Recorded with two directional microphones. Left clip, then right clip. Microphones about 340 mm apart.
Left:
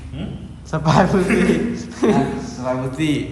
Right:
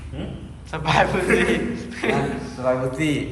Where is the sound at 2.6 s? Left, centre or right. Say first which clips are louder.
Right 1 dB; centre.